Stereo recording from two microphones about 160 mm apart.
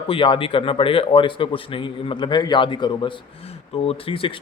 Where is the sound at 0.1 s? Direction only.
35° left (ahead or behind).